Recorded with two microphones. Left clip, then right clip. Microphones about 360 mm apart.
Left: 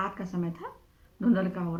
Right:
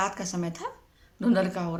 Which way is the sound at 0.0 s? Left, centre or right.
Right.